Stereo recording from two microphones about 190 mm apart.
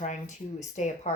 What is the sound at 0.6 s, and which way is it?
Speech, 40° left (ahead or behind).